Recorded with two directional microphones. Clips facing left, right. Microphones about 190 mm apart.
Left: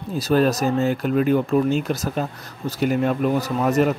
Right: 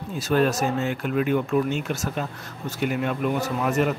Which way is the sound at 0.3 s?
35° left (ahead or behind).